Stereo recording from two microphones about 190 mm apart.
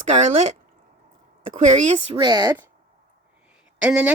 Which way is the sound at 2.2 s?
20° right (ahead or behind).